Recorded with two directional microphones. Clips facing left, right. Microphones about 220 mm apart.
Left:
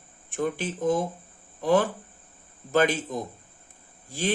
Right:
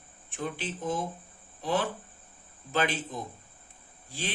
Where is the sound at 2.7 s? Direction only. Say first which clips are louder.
Left 7 dB; 45° left (ahead or behind).